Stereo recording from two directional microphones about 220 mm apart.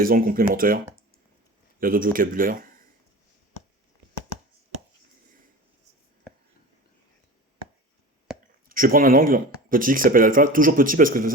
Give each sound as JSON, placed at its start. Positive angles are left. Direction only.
{"t": 0.0, "sound": "speech", "side_deg": -40}
{"t": 1.8, "sound": "speech", "side_deg": -40}
{"t": 8.7, "sound": "speech", "side_deg": -40}